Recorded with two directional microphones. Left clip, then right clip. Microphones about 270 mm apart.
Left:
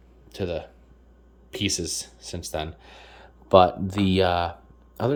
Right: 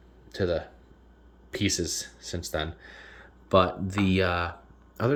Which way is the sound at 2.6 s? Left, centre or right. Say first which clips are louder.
Left 1 dB; left.